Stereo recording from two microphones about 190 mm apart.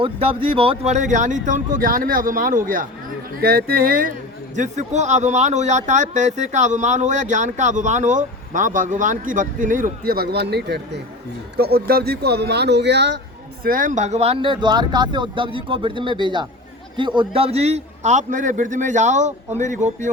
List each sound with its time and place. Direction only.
0.0 s speech: 30° right (ahead or behind); by 13.1 s 65° right (ahead or behind)
13.7 s speech: 45° right (ahead or behind)